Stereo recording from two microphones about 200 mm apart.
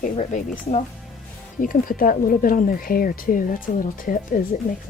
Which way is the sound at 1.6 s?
45° left (ahead or behind).